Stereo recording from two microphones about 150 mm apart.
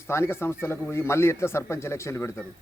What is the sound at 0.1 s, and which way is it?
A man's voice, 15° left (ahead or behind).